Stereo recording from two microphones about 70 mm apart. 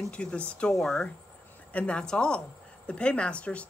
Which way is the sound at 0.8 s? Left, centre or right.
Centre.